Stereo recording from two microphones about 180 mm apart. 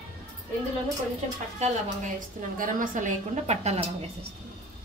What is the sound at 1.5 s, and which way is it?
A woman's voice, 40° right (ahead or behind).